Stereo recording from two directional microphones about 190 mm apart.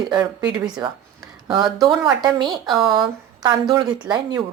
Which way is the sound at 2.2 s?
25° right (ahead or behind).